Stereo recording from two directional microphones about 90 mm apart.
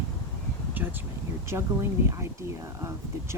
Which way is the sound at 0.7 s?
20° right (ahead or behind).